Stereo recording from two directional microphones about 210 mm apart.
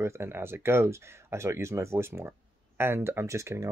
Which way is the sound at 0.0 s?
10° right (ahead or behind).